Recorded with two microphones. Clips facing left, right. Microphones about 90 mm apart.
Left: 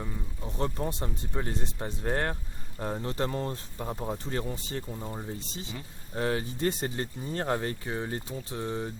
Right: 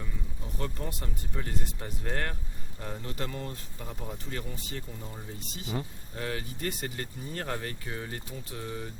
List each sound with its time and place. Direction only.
0.0 s speech: 30° left (ahead or behind)